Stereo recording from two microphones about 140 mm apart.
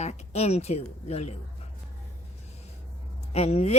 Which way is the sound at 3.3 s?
50° left (ahead or behind).